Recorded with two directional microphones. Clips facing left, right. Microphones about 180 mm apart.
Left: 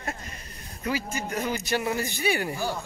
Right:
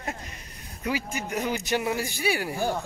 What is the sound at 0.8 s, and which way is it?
A man's voice, 15° right (ahead or behind).